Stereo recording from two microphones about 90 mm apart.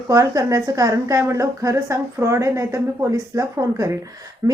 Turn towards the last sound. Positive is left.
turn(degrees=-40)  # may be behind; listen again after turning